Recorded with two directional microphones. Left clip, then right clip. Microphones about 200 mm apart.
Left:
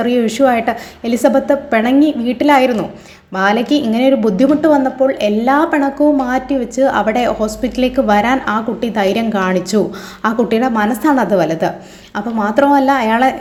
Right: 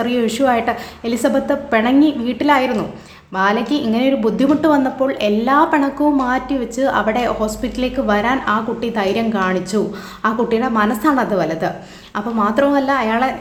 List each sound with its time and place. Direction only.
0.0 s a woman's voice: 15° left (ahead or behind)